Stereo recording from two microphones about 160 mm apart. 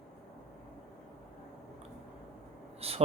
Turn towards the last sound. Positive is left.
turn(degrees=-40)  # may be behind; listen again after turning